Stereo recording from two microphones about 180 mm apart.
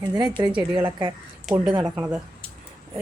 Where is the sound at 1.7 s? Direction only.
20° right (ahead or behind).